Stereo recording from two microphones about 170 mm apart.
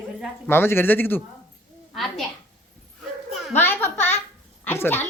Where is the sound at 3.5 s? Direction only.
15° left (ahead or behind).